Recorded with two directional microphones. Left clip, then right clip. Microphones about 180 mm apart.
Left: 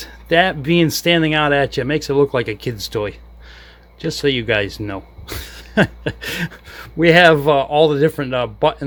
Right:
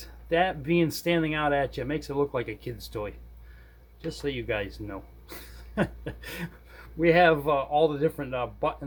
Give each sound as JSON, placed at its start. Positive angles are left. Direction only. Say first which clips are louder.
{"t": 0.0, "sound": "speech", "louder": "left 10 dB", "side_deg": 45}